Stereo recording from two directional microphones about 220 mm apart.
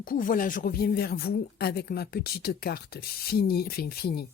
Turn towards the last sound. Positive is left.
turn(degrees=45)  # may be behind; listen again after turning